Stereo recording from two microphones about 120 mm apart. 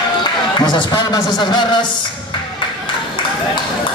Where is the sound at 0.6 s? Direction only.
40° left (ahead or behind).